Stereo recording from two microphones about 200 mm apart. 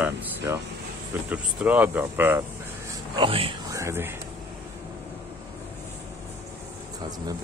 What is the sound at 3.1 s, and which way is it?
Speech, 25° right (ahead or behind).